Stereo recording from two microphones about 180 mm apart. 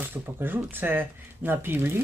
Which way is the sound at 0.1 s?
10° right (ahead or behind).